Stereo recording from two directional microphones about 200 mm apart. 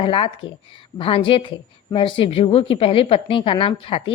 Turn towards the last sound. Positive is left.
turn(degrees=25)  # may be behind; listen again after turning